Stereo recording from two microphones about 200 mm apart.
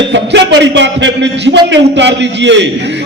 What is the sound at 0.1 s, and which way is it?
A man's voice, 60° right (ahead or behind).